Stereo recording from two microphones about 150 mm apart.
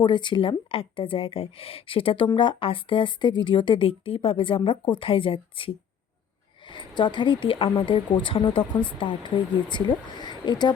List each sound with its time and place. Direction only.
0.0 s speech: 30° left (ahead or behind)